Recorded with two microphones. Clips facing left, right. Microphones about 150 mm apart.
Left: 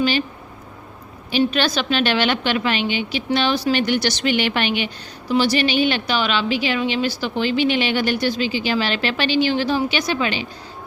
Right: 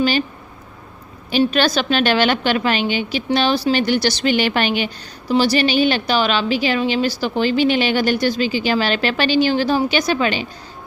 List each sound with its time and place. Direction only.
1.3 s a woman's voice: 45° right (ahead or behind)